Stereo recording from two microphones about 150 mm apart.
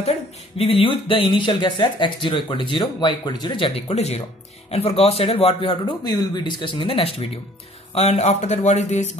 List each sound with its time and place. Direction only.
0.6 s speech: 40° left (ahead or behind)